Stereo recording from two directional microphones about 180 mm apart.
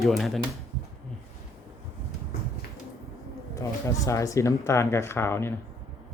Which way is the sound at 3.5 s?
15° left (ahead or behind).